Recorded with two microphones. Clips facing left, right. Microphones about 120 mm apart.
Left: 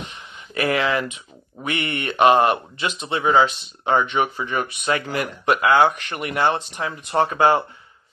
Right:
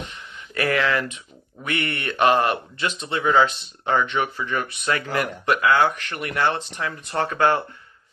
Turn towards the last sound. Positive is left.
turn(degrees=20)  # may be behind; listen again after turning